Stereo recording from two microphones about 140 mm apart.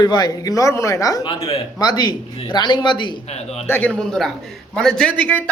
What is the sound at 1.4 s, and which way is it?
Speech, 45° left (ahead or behind).